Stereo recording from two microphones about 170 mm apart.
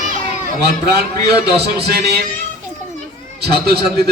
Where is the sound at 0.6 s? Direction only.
70° right (ahead or behind).